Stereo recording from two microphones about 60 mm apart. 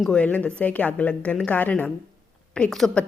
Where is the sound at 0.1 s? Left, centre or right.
Left.